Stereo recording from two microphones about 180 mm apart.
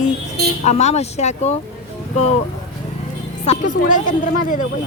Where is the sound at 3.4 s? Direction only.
45° left (ahead or behind).